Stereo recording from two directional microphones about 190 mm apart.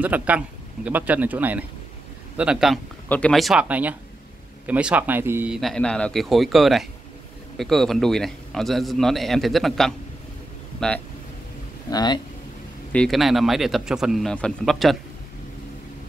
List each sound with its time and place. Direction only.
0.0 s a man's voice: 10° right (ahead or behind)
5.6 s a man's voice: centre (ahead or behind)
11.9 s speech: 20° left (ahead or behind)
12.9 s a man's voice: 5° left (ahead or behind)